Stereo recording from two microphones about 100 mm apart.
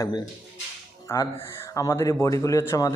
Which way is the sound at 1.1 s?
35° left (ahead or behind).